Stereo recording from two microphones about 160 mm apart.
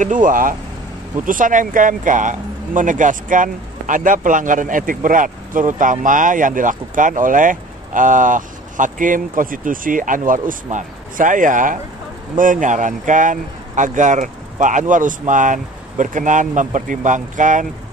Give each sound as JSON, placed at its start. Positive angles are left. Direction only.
{"t": 0.0, "sound": "speech", "side_deg": -55}